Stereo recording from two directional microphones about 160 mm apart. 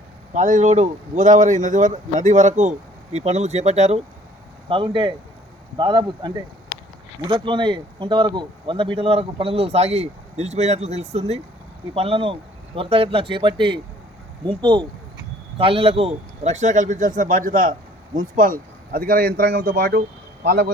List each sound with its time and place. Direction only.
0.3 s speech: 50° right (ahead or behind)
4.7 s speech: 30° right (ahead or behind); by 18.5 s 60° right (ahead or behind)
18.9 s a man's voice: 70° right (ahead or behind); by 20.7 s 90° right